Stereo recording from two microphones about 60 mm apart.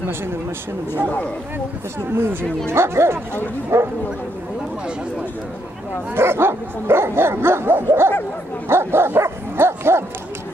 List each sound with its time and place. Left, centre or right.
2.0 s dog: right
6.1 s dog: right